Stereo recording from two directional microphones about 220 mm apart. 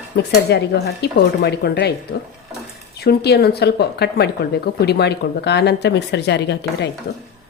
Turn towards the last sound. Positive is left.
turn(degrees=50)  # may be behind; listen again after turning